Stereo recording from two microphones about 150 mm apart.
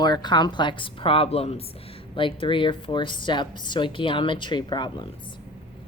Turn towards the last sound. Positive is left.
turn(degrees=30)  # may be behind; listen again after turning